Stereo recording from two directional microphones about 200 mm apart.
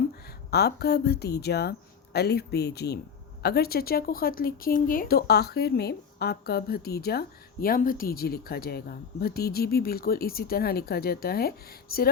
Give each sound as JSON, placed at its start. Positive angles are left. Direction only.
{"t": 0.5, "sound": "a woman's voice", "side_deg": 55}